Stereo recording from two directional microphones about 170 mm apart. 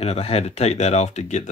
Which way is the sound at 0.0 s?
35° left (ahead or behind).